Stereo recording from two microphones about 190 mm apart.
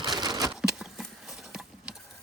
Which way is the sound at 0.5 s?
5° right (ahead or behind).